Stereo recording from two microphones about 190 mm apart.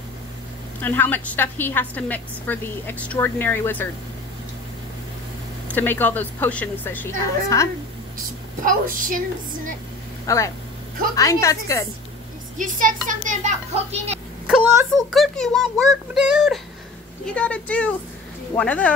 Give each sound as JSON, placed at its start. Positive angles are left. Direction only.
{"t": 0.7, "sound": "a woman's voice", "side_deg": 10}
{"t": 5.7, "sound": "a woman's voice", "side_deg": 10}
{"t": 8.6, "sound": "speech", "side_deg": -45}
{"t": 10.2, "sound": "a woman's voice", "side_deg": 15}
{"t": 12.5, "sound": "speech", "side_deg": -45}
{"t": 14.5, "sound": "a child's voice", "side_deg": 0}